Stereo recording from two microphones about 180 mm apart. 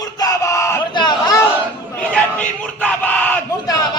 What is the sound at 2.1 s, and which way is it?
Crowd, 10° left (ahead or behind).